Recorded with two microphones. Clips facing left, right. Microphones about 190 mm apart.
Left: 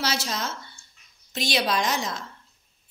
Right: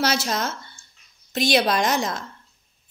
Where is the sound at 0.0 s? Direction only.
50° right (ahead or behind).